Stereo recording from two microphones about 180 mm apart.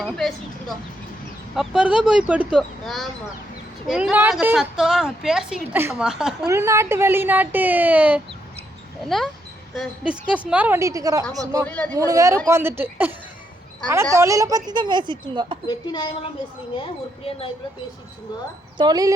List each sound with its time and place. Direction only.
0.0 s a woman's voice: centre (ahead or behind)
6.5 s a woman's voice: 15° right (ahead or behind)
11.6 s speech: 10° left (ahead or behind)
11.9 s speech: 15° right (ahead or behind)
15.6 s a woman's voice: 25° left (ahead or behind)
18.8 s speech: 20° right (ahead or behind)